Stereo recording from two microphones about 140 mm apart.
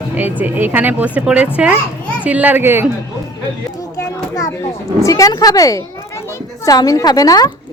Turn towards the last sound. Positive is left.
turn(degrees=25)  # may be behind; listen again after turning